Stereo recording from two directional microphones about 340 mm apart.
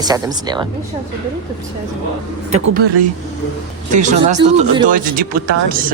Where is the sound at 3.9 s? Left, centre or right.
Right.